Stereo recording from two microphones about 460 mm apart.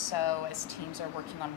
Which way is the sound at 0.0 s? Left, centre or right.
Left.